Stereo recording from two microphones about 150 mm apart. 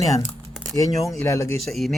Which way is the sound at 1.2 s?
20° left (ahead or behind).